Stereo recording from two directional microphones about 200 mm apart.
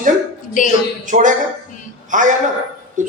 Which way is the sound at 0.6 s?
40° left (ahead or behind).